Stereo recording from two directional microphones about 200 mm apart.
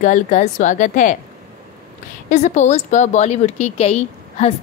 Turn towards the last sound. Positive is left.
turn(degrees=30)  # may be behind; listen again after turning